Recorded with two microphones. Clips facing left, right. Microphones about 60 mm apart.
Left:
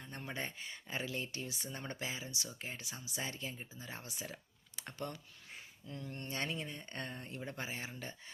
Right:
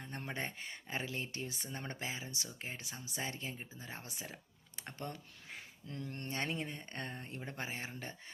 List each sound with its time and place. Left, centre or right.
0.0 s speech: right
5.9 s speech: right
6.3 s speech: right